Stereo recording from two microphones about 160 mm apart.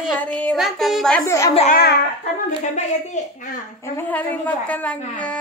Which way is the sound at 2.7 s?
50° left (ahead or behind).